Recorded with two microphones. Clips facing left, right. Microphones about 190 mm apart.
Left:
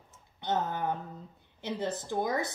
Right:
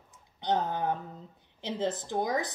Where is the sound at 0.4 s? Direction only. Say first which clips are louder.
Right 2 dB; 15° right (ahead or behind).